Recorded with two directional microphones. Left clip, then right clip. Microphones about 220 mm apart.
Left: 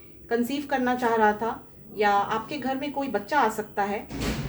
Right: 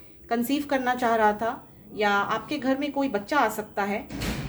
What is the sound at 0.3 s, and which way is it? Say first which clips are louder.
A woman's voice: even; 50° right (ahead or behind).